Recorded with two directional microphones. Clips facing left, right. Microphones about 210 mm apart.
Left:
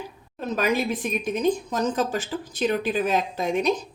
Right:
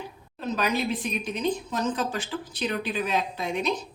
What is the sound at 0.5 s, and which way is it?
A woman's voice, 45° left (ahead or behind).